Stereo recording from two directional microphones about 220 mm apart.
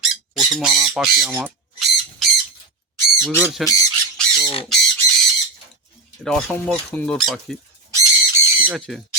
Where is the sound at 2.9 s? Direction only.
Centre (ahead or behind).